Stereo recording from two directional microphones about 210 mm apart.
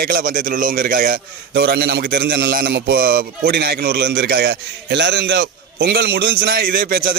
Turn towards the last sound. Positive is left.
turn(degrees=-45)  # may be behind; listen again after turning